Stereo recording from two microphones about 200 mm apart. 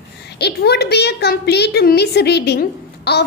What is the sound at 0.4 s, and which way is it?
A woman's voice, 55° left (ahead or behind).